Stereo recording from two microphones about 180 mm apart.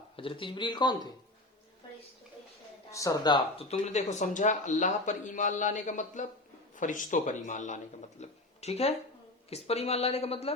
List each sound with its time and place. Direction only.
0.2 s speech: 30° left (ahead or behind)
2.9 s a woman's voice: 20° left (ahead or behind); by 10.5 s 35° left (ahead or behind)